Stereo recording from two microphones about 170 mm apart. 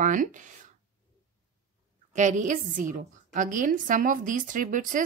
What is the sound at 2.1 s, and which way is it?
A woman's voice, 45° right (ahead or behind).